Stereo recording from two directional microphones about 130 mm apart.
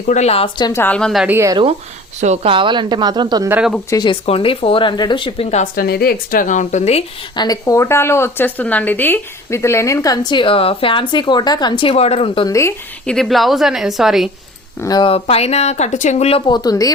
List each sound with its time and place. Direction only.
0.1 s a woman's voice: 55° left (ahead or behind)
0.6 s a woman's voice: 20° left (ahead or behind)
0.9 s a woman's voice: 5° left (ahead or behind)
2.2 s speech: 60° right (ahead or behind)
2.5 s a woman's voice: 40° right (ahead or behind)
3.8 s speech: 35° left (ahead or behind)
5.5 s speech: 65° left (ahead or behind)
6.3 s speech: 75° left (ahead or behind); by 7.0 s 60° left (ahead or behind)
7.3 s a woman's voice: 30° left (ahead or behind); by 12.5 s 45° left (ahead or behind)
12.5 s a woman's voice: 20° left (ahead or behind)
13.1 s a woman's voice: centre (ahead or behind)
14.8 s speech: 35° left (ahead or behind)
15.1 s speech: 50° left (ahead or behind)
16.5 s a woman's voice: 30° left (ahead or behind)